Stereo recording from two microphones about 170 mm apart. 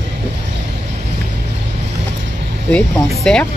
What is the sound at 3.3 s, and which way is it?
Speech, 5° left (ahead or behind).